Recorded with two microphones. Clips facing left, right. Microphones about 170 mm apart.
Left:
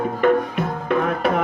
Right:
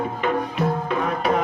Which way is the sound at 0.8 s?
55° left (ahead or behind).